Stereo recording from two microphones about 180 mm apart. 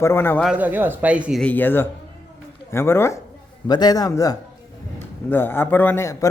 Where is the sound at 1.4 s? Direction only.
10° left (ahead or behind).